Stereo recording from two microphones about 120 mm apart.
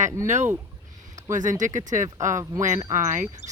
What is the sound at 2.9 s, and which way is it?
Speech, 90° right.